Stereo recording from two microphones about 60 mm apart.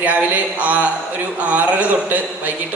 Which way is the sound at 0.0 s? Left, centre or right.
Right.